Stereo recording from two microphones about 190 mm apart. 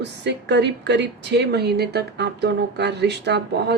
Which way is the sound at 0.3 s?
65° right (ahead or behind).